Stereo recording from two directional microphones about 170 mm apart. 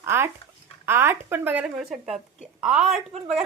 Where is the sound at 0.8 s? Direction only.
15° right (ahead or behind).